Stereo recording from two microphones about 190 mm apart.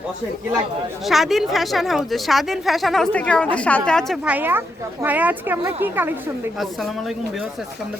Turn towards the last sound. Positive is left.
turn(degrees=0)  # may be behind; listen again after turning